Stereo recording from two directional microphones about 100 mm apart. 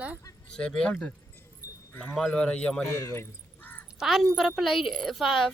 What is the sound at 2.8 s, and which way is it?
Speech, 35° left (ahead or behind).